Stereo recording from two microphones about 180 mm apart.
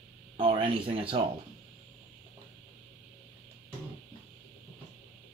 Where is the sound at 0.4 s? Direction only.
30° right (ahead or behind).